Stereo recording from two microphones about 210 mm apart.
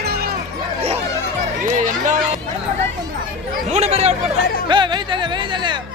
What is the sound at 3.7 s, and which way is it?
Speech, 30° right (ahead or behind).